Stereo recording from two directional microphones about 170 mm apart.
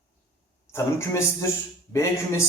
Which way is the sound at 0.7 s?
15° left (ahead or behind).